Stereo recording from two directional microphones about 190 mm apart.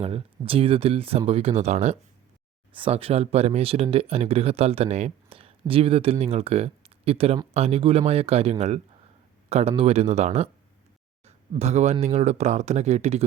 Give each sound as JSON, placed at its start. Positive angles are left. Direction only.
{"t": 0.0, "sound": "speech", "side_deg": -30}